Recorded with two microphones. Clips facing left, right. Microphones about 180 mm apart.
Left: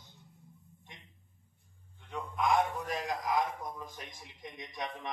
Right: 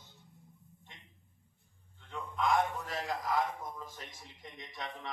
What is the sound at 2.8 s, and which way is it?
A man's voice, 15° left (ahead or behind).